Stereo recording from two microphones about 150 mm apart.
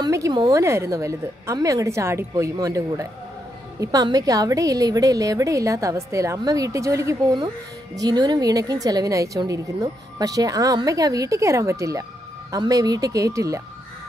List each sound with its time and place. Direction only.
0.0 s a woman's voice: 25° right (ahead or behind)